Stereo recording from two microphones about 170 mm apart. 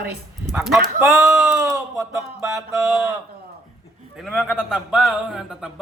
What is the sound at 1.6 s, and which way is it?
Speech, 20° right (ahead or behind).